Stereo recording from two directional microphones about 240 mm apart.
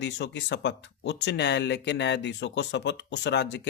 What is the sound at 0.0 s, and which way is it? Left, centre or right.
Speech, left.